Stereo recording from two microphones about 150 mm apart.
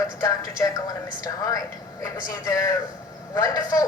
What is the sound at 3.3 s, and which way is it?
Speech, 25° left (ahead or behind).